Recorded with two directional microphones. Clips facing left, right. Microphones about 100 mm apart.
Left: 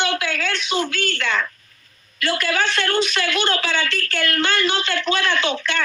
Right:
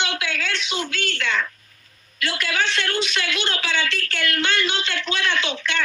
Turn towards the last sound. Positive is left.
turn(degrees=45)  # may be behind; listen again after turning